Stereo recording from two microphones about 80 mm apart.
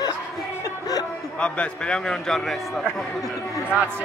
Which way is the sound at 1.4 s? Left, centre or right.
Centre.